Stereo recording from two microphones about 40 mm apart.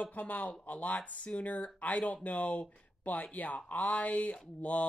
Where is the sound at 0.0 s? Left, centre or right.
Left.